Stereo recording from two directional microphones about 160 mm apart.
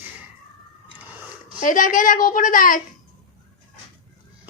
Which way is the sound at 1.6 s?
55° left (ahead or behind).